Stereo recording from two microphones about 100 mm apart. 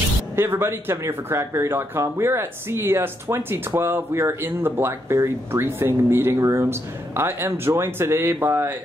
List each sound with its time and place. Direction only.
0.4 s speech: 25° right (ahead or behind)